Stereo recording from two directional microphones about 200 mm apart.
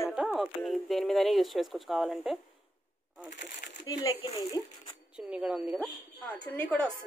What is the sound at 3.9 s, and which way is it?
Speech, 20° left (ahead or behind).